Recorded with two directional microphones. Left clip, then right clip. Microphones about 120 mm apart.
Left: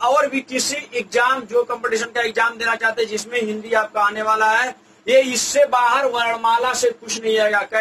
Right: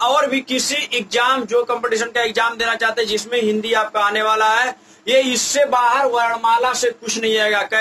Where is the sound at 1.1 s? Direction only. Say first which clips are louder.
Even; 30° right (ahead or behind).